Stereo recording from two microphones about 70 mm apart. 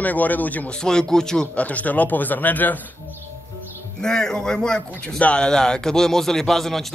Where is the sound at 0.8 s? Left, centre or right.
Centre.